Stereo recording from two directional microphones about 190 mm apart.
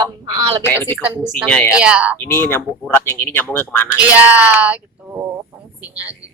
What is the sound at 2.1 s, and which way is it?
A man's voice, 10° left (ahead or behind).